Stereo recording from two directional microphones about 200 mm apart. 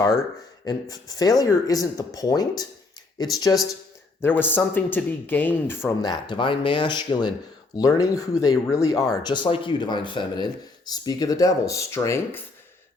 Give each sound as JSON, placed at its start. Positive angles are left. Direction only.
{"t": 0.6, "sound": "speech", "side_deg": 20}